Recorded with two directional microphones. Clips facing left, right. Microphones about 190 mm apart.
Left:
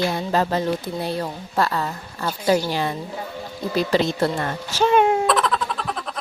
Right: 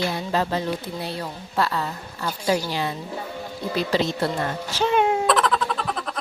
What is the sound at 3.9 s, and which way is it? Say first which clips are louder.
A woman's voice: left 2 dB; 50° left (ahead or behind).